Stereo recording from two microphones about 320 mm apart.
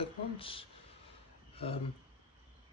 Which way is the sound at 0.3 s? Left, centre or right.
Centre.